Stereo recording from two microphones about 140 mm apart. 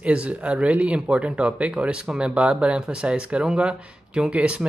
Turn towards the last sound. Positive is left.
turn(degrees=-10)  # may be behind; listen again after turning